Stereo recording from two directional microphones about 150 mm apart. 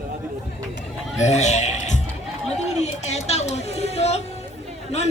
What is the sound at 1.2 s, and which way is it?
A man's voice, 50° left (ahead or behind).